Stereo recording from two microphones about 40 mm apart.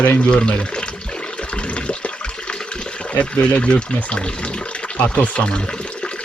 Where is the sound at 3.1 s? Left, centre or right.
Left.